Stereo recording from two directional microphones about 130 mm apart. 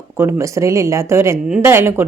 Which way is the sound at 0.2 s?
20° right (ahead or behind).